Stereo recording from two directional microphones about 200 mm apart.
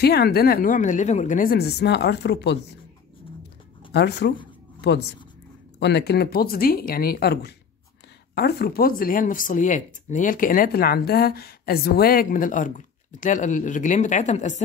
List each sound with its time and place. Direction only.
0.0 s speech: 55° left (ahead or behind)
3.9 s speech: 55° left (ahead or behind)
5.8 s speech: 60° left (ahead or behind); by 14.6 s 35° left (ahead or behind)